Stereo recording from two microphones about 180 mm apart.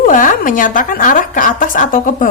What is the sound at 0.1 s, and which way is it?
Speech, 45° left (ahead or behind).